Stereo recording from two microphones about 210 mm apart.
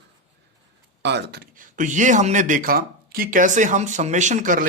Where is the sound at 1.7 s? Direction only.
35° right (ahead or behind).